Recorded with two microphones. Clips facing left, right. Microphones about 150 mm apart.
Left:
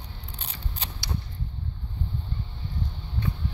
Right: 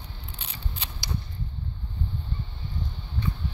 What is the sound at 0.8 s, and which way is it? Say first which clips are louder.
Creak: left 2 dB; 45° left (ahead or behind).